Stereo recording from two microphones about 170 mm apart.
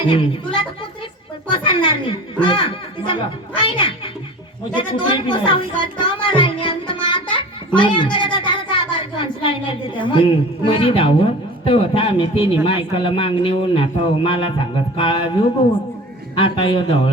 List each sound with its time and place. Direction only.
0.1 s a man's voice: 30° left (ahead or behind)